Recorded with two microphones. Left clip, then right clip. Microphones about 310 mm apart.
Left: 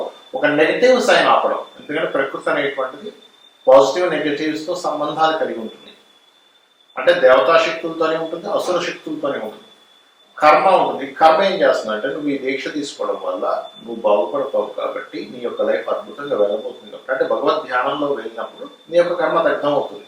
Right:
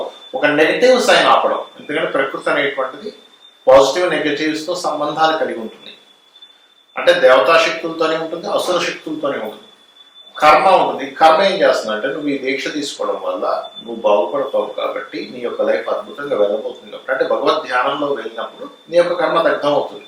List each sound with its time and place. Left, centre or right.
0.4 s speech: centre
3.7 s a man's voice: left
3.9 s a man's voice: centre; by 5.3 s left
5.3 s speech: centre
6.9 s speech: centre
8.4 s a man's voice: left
8.8 s speech: centre
13.0 s a man's voice: left
14.9 s speech: centre